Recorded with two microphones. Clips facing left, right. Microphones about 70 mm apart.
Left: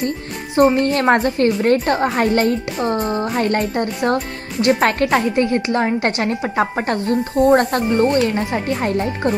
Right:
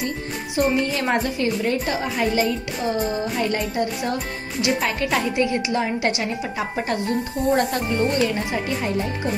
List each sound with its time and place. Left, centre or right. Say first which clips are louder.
0.7 s a woman's voice: left 6 dB; left